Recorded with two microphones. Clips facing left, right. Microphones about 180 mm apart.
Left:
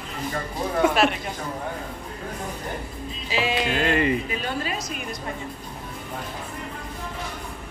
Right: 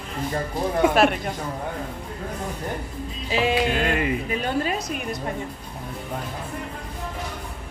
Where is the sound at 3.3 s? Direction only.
50° right (ahead or behind).